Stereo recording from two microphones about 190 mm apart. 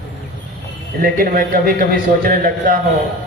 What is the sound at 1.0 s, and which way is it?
Speech, 50° right (ahead or behind).